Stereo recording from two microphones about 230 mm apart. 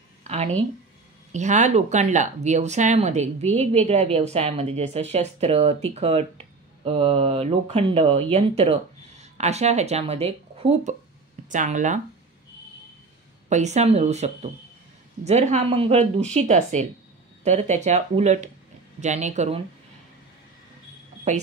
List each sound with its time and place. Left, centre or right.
0.2 s a woman's voice: right
13.5 s a woman's voice: right
21.3 s a woman's voice: right